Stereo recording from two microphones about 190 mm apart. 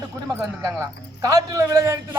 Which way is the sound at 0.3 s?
15° right (ahead or behind).